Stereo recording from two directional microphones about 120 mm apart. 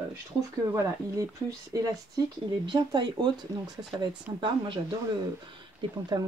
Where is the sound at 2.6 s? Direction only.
40° right (ahead or behind).